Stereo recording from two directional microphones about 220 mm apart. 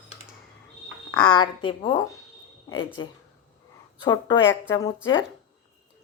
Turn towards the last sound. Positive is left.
turn(degrees=20)  # may be behind; listen again after turning